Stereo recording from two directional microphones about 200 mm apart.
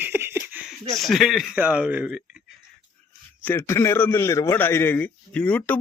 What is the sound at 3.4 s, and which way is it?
A man's voice, 10° left (ahead or behind).